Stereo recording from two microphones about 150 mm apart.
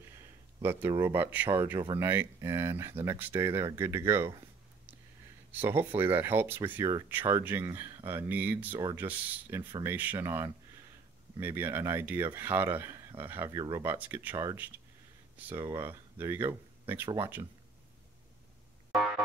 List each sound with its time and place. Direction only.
0.6 s speech: 15° right (ahead or behind)
5.5 s speech: 15° right (ahead or behind)
13.8 s speech: 15° right (ahead or behind)